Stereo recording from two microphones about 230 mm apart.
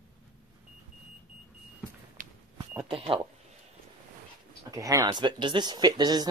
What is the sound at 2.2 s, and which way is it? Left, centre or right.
Walk, right.